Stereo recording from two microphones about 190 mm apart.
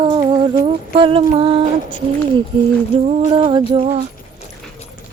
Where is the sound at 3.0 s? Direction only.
30° right (ahead or behind).